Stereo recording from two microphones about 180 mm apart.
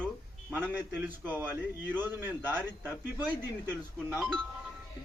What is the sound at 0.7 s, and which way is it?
A man's voice, 10° right (ahead or behind).